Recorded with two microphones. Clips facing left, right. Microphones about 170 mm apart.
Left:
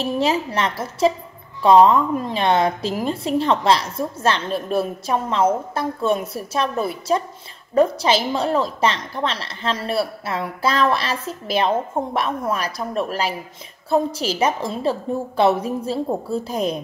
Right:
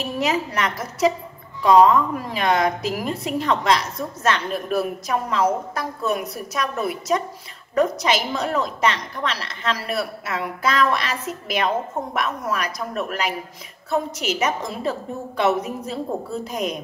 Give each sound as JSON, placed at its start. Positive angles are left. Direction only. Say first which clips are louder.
{"t": 0.0, "sound": "a woman's voice", "louder": "left 3 dB", "side_deg": 30}